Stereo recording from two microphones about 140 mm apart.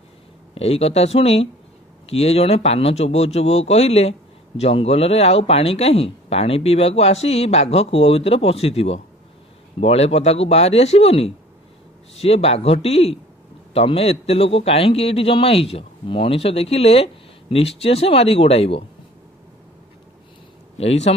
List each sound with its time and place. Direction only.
0.6 s a man's voice: 45° left (ahead or behind)
20.7 s a man's voice: 50° left (ahead or behind)